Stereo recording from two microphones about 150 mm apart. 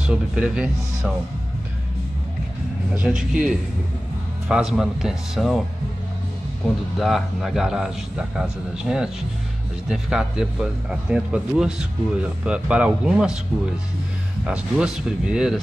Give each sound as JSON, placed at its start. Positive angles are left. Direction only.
{"t": 0.0, "sound": "speech", "side_deg": -5}
{"t": 2.9, "sound": "a man's voice", "side_deg": -5}
{"t": 7.0, "sound": "a man's voice", "side_deg": 0}
{"t": 14.4, "sound": "a man's voice", "side_deg": -5}